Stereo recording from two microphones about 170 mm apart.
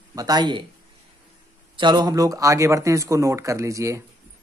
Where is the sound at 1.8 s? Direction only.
25° right (ahead or behind).